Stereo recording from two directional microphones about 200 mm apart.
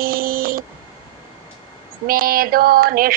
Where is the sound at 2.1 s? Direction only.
45° right (ahead or behind).